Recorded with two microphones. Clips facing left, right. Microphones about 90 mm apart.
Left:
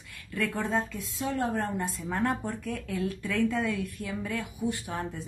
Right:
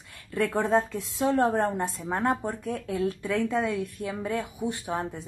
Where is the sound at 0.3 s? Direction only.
30° right (ahead or behind).